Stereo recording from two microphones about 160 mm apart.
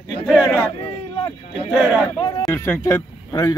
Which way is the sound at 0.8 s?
35° left (ahead or behind).